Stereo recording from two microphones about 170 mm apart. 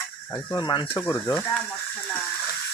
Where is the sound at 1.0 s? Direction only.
15° left (ahead or behind).